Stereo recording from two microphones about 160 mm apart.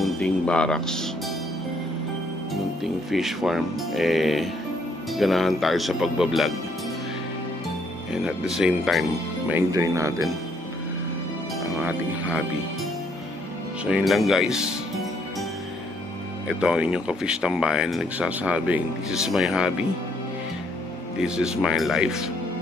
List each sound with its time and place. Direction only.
0.2 s speech: 5° left (ahead or behind)
2.8 s speech: centre (ahead or behind)
8.1 s speech: 5° right (ahead or behind)
9.5 s speech: 15° right (ahead or behind)
11.8 s speech: 10° right (ahead or behind)
13.8 s speech: 5° right (ahead or behind)
16.4 s speech: 5° right (ahead or behind)
21.2 s speech: 5° right (ahead or behind)